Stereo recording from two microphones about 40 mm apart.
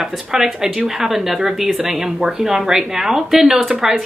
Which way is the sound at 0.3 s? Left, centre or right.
Centre.